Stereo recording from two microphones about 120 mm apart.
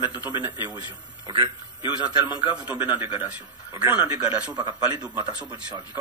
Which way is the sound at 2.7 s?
15° right (ahead or behind).